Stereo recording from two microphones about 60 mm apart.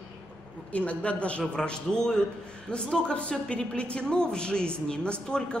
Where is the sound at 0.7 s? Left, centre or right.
Left.